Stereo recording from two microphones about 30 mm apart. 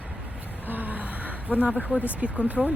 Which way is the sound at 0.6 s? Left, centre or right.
Right.